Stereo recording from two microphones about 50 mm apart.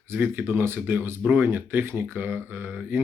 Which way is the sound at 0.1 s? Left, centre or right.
Right.